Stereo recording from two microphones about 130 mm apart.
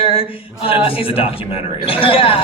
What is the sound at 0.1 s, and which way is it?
A man's voice, 45° left (ahead or behind).